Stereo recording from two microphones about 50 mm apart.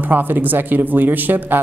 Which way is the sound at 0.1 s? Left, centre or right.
Right.